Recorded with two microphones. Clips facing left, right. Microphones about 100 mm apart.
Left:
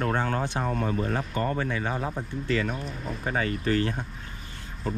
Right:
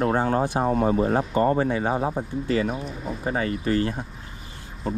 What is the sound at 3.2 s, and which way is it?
Speech, 35° right (ahead or behind).